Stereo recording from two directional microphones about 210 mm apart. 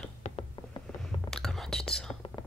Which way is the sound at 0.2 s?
35° left (ahead or behind).